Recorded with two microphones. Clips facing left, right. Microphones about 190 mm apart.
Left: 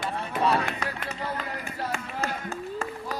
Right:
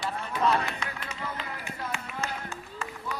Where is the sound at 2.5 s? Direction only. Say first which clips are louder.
Left 7 dB; 35° left (ahead or behind).